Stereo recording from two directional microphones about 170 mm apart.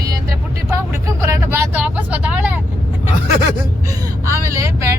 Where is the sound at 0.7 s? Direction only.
15° right (ahead or behind).